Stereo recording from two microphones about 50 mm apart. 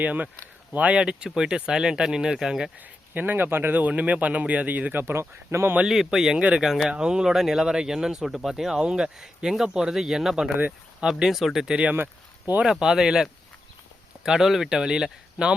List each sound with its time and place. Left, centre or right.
0.0 s speech: right
0.9 s speech: centre
2.7 s speech: right
5.5 s speech: right
5.8 s speech: centre
12.8 s speech: centre
14.3 s speech: centre